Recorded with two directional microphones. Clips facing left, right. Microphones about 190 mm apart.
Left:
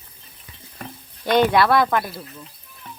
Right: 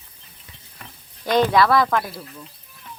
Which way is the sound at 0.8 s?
55° left (ahead or behind).